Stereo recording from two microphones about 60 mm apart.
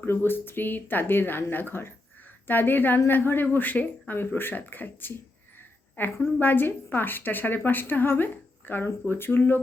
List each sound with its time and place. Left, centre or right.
0.0 s a woman's voice: left